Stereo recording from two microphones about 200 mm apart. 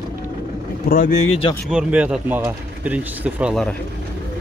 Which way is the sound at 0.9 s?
45° left (ahead or behind).